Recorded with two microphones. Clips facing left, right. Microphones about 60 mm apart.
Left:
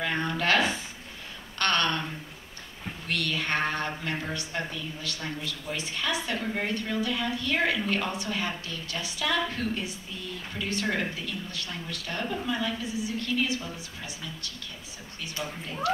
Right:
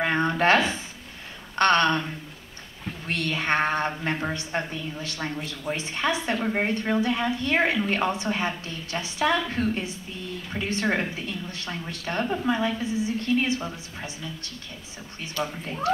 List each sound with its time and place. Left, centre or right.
0.0 s a sound: right
1.6 s a woman's voice: right
3.1 s a woman's voice: right